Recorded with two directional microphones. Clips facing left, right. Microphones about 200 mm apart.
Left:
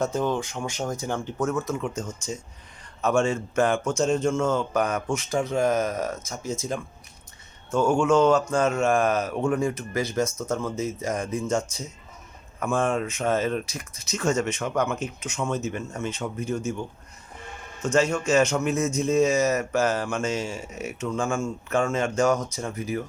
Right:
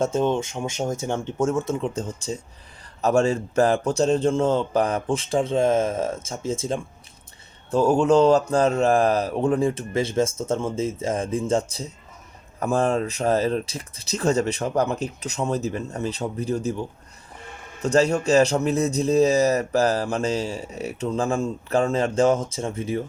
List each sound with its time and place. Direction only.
0.0 s a man's voice: 25° right (ahead or behind)
17.8 s a man's voice: 35° right (ahead or behind)